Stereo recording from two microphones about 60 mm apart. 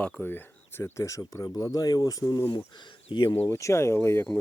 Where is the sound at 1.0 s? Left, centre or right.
Left.